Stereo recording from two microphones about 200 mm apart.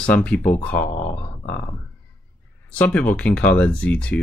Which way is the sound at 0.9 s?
35° left (ahead or behind).